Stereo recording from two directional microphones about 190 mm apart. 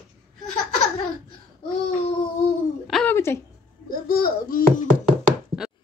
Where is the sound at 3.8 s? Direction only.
50° left (ahead or behind).